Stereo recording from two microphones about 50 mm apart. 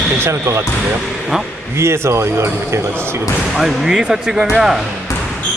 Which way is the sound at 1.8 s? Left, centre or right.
Right.